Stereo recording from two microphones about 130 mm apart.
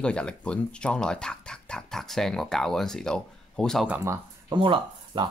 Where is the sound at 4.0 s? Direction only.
20° right (ahead or behind).